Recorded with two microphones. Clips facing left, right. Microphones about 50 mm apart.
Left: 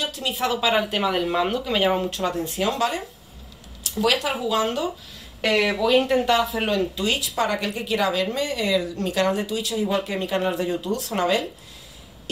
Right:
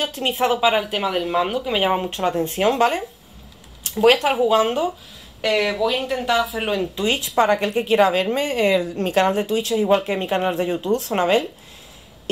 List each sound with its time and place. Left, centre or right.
0.0 s speech: right
0.7 s speech: centre; by 3.0 s right
4.0 s speech: right
5.4 s speech: centre
7.0 s speech: right